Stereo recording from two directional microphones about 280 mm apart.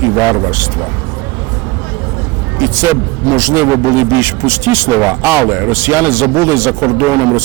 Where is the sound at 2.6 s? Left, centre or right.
Centre.